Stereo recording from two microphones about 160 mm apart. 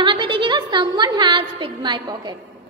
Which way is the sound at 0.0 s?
30° right (ahead or behind).